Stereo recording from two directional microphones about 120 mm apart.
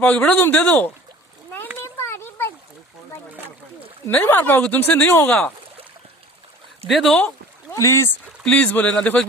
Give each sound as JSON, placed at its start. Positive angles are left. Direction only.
{"t": 0.0, "sound": "speech", "side_deg": 10}
{"t": 1.8, "sound": "a sound", "side_deg": 20}
{"t": 4.0, "sound": "speech", "side_deg": 20}
{"t": 6.8, "sound": "speech", "side_deg": 0}
{"t": 7.7, "sound": "speech", "side_deg": 25}
{"t": 8.4, "sound": "speech", "side_deg": 10}